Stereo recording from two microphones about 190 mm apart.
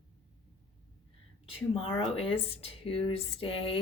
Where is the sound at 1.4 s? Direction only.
30° left (ahead or behind).